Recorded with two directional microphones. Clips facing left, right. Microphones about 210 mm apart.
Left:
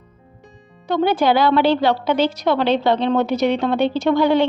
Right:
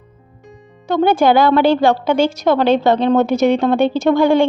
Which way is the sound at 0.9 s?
45° right (ahead or behind).